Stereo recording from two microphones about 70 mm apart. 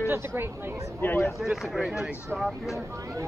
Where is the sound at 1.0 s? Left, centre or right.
Left.